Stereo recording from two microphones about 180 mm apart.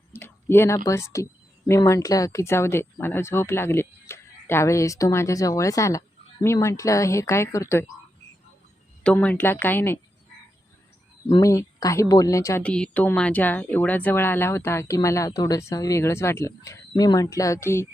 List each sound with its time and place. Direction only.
0.2 s a sound: 15° left (ahead or behind)
0.9 s speech: 15° left (ahead or behind)
9.0 s speech: 10° left (ahead or behind)
11.3 s speech: 15° left (ahead or behind)